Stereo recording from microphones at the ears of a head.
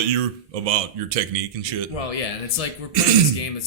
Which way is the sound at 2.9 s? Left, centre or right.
Right.